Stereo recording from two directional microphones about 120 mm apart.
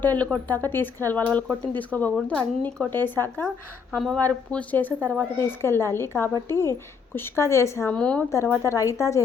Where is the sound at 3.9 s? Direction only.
5° left (ahead or behind); by 7.9 s 25° left (ahead or behind).